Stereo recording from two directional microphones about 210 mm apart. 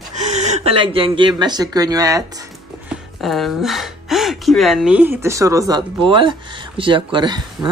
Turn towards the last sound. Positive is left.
turn(degrees=-20)  # may be behind; listen again after turning